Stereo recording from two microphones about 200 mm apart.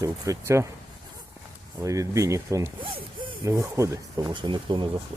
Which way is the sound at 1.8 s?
15° right (ahead or behind).